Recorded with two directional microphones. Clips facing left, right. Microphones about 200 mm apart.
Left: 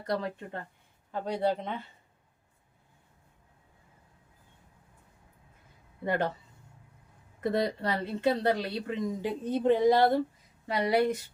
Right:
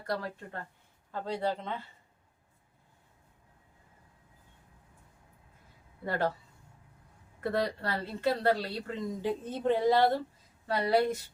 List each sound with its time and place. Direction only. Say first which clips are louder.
0.0 s a woman's voice: left 3 dB; 20° left (ahead or behind)
6.1 s a woman's voice: left 2 dB; 20° left (ahead or behind)
7.4 s a woman's voice: left 3 dB; 20° left (ahead or behind)